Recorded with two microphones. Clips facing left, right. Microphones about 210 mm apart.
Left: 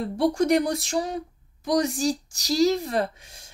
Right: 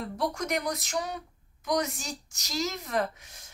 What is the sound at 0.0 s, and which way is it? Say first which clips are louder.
Speech: left 9 dB; 30° left (ahead or behind).